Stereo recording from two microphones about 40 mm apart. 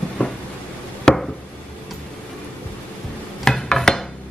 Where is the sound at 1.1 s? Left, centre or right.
Centre.